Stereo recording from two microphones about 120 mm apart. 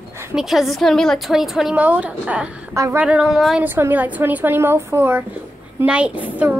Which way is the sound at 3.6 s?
20° right (ahead or behind).